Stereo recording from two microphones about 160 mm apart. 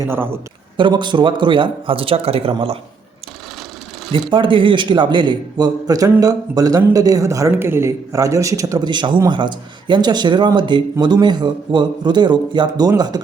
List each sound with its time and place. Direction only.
0.0 s a man's voice: 15° right (ahead or behind)
0.8 s speech: 30° right (ahead or behind)
4.1 s a man's voice: 30° right (ahead or behind)